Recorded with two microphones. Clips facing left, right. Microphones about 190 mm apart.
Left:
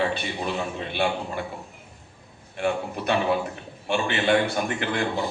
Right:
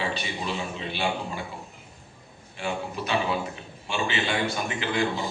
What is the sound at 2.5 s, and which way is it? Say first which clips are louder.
A man's voice: left 5 dB; 55° left (ahead or behind).